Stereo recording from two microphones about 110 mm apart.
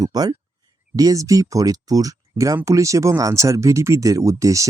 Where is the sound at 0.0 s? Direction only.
35° right (ahead or behind).